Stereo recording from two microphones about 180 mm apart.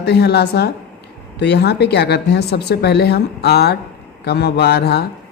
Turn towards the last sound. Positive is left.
turn(degrees=65)  # may be behind; listen again after turning